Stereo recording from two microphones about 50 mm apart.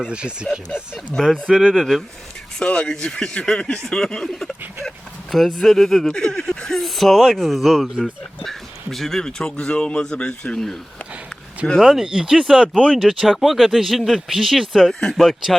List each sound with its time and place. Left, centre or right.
0.1 s speech: centre
1.2 s speech: centre
2.6 s speech: centre
11.8 s speech: centre